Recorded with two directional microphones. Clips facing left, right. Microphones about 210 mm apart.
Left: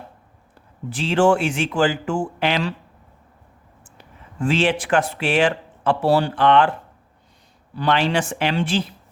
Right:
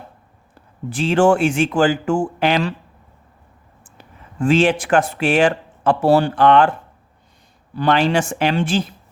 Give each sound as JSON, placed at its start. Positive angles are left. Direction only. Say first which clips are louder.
{"t": 0.9, "sound": "speech", "louder": "right 2 dB", "side_deg": -50}
{"t": 3.9, "sound": "speech", "louder": "right 3 dB", "side_deg": -50}
{"t": 7.8, "sound": "speech", "louder": "right 3 dB", "side_deg": -45}